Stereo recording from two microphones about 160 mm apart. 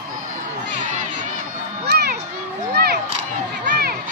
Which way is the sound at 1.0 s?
50° right (ahead or behind).